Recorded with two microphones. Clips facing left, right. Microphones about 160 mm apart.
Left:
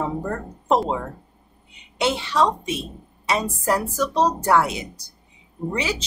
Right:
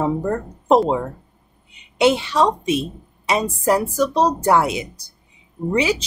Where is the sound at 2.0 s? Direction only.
15° right (ahead or behind).